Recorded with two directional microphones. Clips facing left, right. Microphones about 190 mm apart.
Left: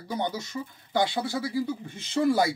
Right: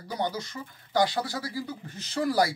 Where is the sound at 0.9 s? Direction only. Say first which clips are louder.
Even; 25° left (ahead or behind).